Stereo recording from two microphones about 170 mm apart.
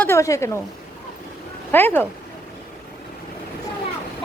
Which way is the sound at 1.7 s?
10° left (ahead or behind).